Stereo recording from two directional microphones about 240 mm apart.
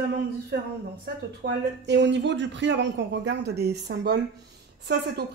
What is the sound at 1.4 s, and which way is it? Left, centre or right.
Speech, right.